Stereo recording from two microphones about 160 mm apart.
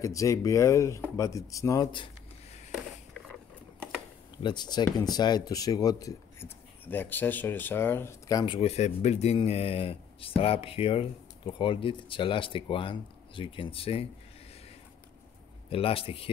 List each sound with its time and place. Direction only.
0.0 s speech: 20° left (ahead or behind)
4.4 s speech: 30° left (ahead or behind)
8.5 s speech: 45° left (ahead or behind)
15.7 s speech: 35° left (ahead or behind)